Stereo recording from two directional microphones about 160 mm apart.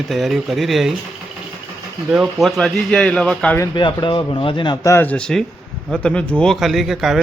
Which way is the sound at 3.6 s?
25° left (ahead or behind).